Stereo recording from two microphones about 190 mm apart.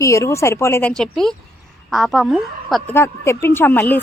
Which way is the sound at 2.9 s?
15° left (ahead or behind).